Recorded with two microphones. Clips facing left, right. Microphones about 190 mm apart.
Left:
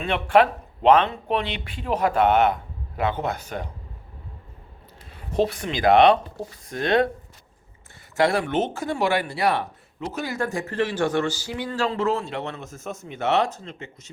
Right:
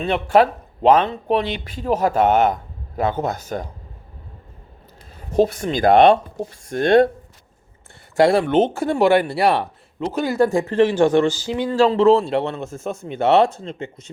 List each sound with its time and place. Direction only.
0.0 s speech: 40° right (ahead or behind)
5.3 s speech: 45° right (ahead or behind)
8.1 s speech: 30° right (ahead or behind)